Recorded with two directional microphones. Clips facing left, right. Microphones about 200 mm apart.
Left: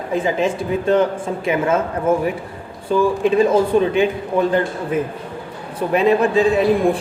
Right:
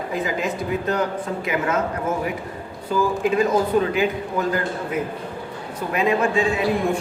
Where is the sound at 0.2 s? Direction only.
30° left (ahead or behind).